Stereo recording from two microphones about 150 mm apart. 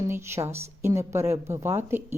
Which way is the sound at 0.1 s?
15° right (ahead or behind).